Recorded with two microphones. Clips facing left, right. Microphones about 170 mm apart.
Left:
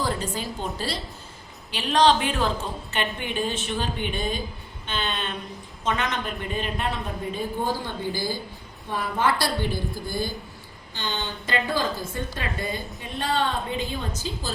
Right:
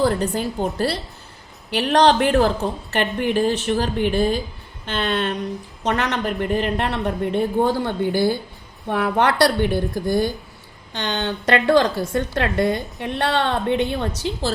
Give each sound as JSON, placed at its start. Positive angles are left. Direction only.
{"t": 0.0, "sound": "a woman's voice", "side_deg": -60}